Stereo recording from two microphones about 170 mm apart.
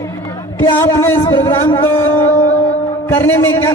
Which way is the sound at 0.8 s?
15° left (ahead or behind).